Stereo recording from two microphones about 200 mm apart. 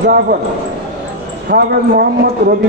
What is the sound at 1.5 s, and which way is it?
Speech, 50° right (ahead or behind).